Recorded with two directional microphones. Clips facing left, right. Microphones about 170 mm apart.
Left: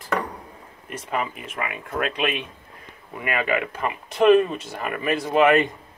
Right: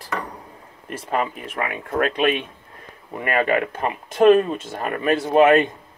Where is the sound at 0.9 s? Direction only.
35° right (ahead or behind).